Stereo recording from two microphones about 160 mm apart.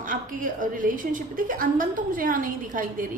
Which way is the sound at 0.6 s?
55° right (ahead or behind).